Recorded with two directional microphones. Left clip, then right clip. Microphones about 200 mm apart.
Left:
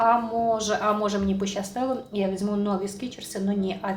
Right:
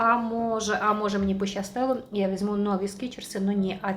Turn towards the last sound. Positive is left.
turn(degrees=-30)  # may be behind; listen again after turning